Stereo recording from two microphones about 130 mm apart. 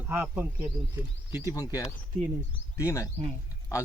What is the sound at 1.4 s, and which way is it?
A man's voice, 25° left (ahead or behind).